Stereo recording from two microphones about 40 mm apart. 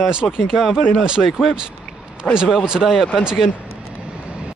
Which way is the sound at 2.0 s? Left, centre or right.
Right.